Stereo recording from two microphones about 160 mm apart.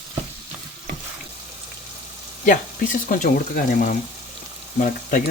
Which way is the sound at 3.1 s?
60° left (ahead or behind).